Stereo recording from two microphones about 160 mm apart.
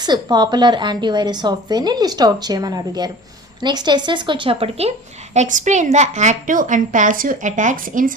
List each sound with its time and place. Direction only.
0.0 s a woman's voice: 25° right (ahead or behind); by 8.1 s 55° right (ahead or behind)